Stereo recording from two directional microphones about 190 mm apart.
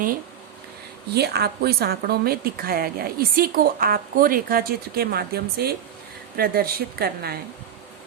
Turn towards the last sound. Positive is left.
turn(degrees=-55)  # may be behind; listen again after turning